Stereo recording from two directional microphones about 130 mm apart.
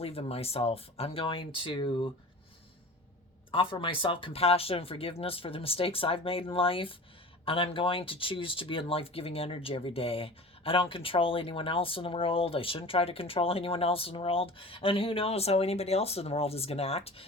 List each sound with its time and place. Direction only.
0.0 s speech: 50° left (ahead or behind)
3.5 s speech: 40° left (ahead or behind)